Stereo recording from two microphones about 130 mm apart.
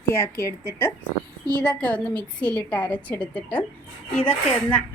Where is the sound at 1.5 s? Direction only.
5° left (ahead or behind).